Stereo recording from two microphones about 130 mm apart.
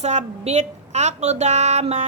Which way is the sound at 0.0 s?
60° right (ahead or behind).